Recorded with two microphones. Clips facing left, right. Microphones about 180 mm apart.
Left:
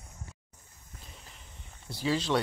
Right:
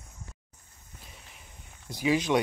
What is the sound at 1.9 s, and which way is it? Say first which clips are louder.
Speech: right 4 dB; 15° right (ahead or behind).